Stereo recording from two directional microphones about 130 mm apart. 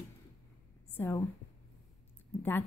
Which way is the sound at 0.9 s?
20° left (ahead or behind).